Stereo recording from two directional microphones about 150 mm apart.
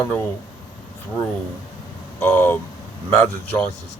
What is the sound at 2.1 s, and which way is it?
Speech, 15° left (ahead or behind).